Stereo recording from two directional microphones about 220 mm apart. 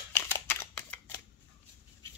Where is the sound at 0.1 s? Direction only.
10° left (ahead or behind).